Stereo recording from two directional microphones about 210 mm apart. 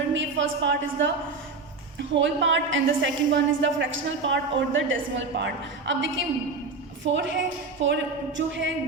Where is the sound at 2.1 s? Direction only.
60° right (ahead or behind).